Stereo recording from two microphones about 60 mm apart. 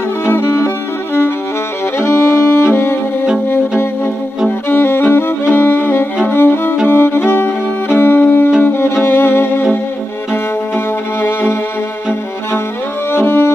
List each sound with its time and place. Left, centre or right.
2.0 s music: left
4.5 s music: left
5.1 s violin: left
6.2 s music: left
13.1 s music: left